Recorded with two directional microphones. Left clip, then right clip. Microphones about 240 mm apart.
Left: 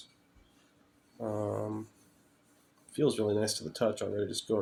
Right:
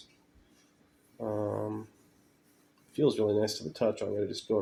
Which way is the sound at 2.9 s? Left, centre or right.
Left.